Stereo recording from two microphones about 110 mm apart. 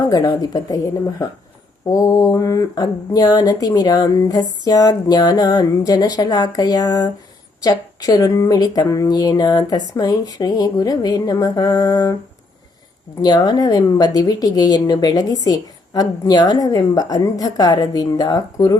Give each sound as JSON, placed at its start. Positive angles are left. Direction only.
{"t": 0.0, "sound": "a woman's voice", "side_deg": 35}
{"t": 1.9, "sound": "a woman's voice", "side_deg": 30}
{"t": 13.2, "sound": "a woman's voice", "side_deg": 35}